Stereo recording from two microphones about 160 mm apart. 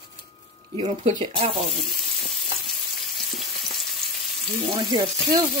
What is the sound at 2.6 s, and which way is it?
Frying, centre (ahead or behind).